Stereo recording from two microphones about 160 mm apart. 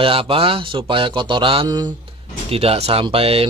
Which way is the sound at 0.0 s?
35° right (ahead or behind).